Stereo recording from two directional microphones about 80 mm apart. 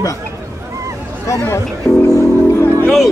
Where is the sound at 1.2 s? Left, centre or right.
Left.